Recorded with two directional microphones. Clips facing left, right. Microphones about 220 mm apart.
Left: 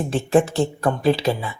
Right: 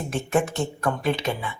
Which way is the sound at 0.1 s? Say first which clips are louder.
Left 5 dB; 30° left (ahead or behind).